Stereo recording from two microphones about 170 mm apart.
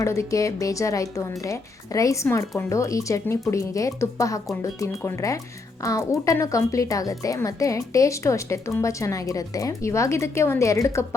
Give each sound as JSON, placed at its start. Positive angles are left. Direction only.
{"t": 0.0, "sound": "speech", "side_deg": 15}